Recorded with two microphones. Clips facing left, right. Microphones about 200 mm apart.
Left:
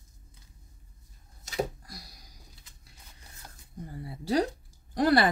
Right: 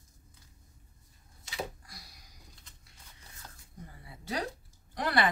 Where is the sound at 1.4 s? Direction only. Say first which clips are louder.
Left 7 dB; 40° left (ahead or behind).